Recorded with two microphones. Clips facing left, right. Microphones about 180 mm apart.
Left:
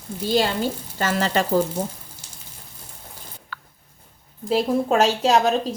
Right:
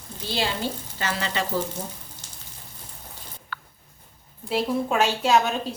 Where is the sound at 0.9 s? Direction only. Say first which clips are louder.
Left 8 dB; 45° left (ahead or behind).